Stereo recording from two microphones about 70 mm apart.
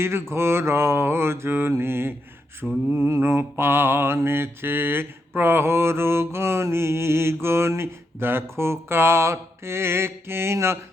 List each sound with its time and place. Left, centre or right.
0.0 s mantra: right